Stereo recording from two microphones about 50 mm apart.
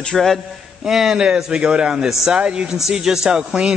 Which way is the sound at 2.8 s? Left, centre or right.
Centre.